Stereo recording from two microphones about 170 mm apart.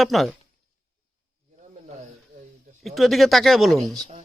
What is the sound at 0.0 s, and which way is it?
Speech, centre (ahead or behind).